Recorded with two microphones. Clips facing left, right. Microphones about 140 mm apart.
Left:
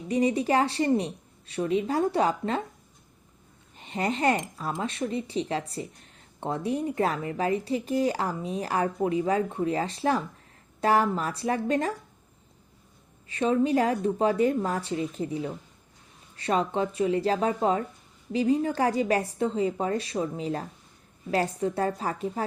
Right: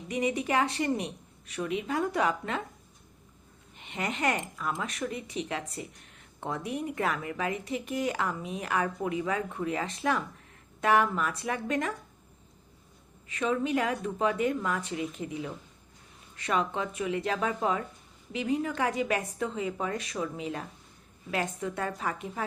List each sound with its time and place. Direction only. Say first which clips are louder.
0.1 s speech: left 5 dB; 35° left (ahead or behind)
3.8 s speech: left 5 dB; 35° left (ahead or behind)
13.2 s speech: left 5 dB; 30° left (ahead or behind)